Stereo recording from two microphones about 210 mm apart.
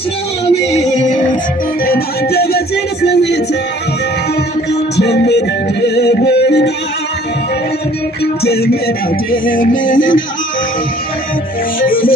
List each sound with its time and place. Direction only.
0.5 s music: 30° left (ahead or behind)
1.8 s music: 45° left (ahead or behind)
4.7 s music: 55° left (ahead or behind)
8.2 s music: 50° left (ahead or behind)
11.8 s music: 45° left (ahead or behind)